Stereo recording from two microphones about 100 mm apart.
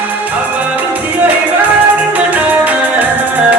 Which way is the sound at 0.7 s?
15° right (ahead or behind).